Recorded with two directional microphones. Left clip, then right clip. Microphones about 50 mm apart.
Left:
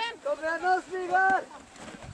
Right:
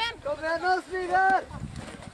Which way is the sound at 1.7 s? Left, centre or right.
Centre.